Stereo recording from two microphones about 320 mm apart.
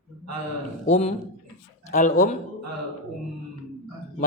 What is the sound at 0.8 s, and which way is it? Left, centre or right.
Mantra, centre.